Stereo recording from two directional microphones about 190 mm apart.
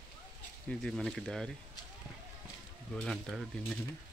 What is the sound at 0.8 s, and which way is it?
Speech, 5° left (ahead or behind).